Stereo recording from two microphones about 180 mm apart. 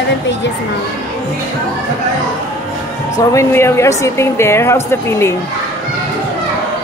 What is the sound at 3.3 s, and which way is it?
A woman's voice, 15° left (ahead or behind).